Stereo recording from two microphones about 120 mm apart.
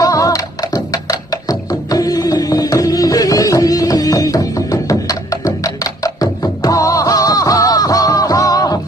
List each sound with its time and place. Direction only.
0.0 s music: 30° left (ahead or behind)